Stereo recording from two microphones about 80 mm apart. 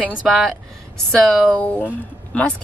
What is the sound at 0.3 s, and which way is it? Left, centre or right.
Speech, centre.